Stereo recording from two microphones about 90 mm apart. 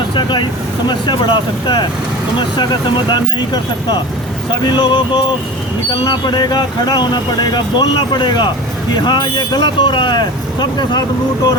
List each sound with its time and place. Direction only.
0.1 s speech: 60° left (ahead or behind)
5.9 s speech: 55° left (ahead or behind)